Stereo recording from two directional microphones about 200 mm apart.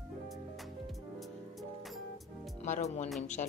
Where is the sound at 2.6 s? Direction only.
35° left (ahead or behind).